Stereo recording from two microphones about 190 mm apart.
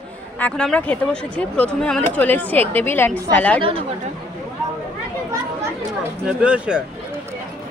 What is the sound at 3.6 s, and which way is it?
Speech, 30° right (ahead or behind).